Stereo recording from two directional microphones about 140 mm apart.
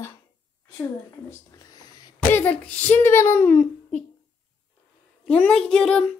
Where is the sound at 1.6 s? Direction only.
30° left (ahead or behind).